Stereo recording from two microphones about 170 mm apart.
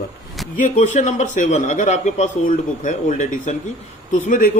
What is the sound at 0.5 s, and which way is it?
Speech, 50° left (ahead or behind).